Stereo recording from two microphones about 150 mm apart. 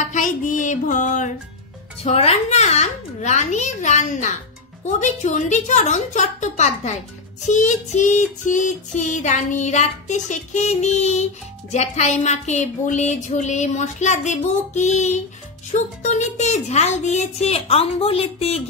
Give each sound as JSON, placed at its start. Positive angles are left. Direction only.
{"t": 0.0, "sound": "music", "side_deg": 55}
{"t": 2.0, "sound": "child singing", "side_deg": 45}